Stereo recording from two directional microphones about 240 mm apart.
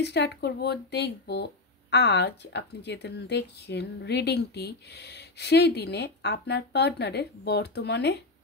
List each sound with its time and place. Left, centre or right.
0.0 s speech: left